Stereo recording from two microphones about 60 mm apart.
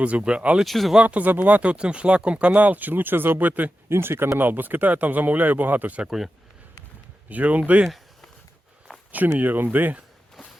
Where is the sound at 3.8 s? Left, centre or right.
Right.